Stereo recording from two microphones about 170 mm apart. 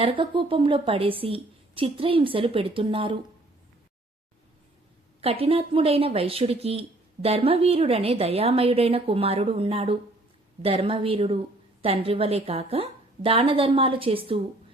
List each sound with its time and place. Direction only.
0.0 s speech: 30° right (ahead or behind)
5.2 s speech: 35° right (ahead or behind)